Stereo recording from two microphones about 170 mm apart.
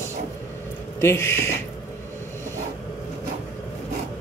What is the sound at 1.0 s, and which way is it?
Speech, 15° left (ahead or behind).